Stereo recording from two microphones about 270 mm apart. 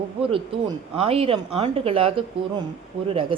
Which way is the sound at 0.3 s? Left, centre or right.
Centre.